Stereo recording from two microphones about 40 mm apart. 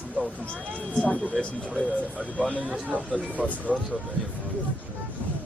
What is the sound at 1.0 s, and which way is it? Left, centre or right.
Speech, left.